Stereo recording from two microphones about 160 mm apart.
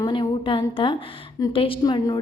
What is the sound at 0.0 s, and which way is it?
A woman's voice, 30° left (ahead or behind).